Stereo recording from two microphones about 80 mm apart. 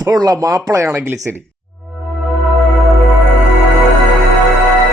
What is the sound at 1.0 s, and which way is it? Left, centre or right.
Speech, right.